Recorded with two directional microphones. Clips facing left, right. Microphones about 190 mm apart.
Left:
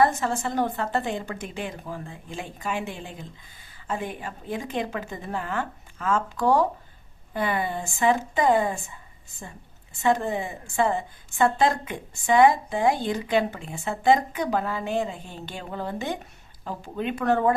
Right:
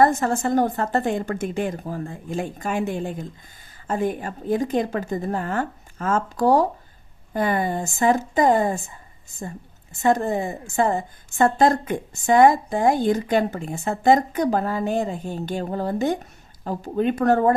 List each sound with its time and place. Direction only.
0.0 s a woman's voice: 45° right (ahead or behind)
10.0 s a woman's voice: 45° right (ahead or behind)